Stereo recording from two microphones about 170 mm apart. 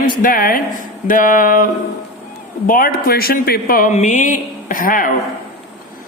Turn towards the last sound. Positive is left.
turn(degrees=55)  # may be behind; listen again after turning